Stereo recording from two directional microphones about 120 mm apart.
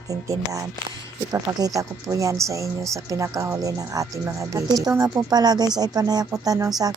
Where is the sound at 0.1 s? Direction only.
30° right (ahead or behind).